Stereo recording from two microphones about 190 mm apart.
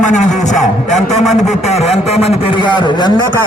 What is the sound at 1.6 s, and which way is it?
A man's voice, 35° left (ahead or behind).